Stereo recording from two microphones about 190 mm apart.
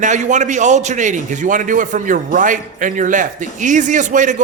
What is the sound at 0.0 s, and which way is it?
A man's voice, 40° right (ahead or behind).